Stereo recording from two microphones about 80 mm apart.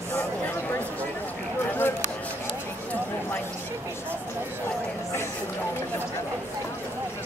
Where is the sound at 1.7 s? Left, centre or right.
Left.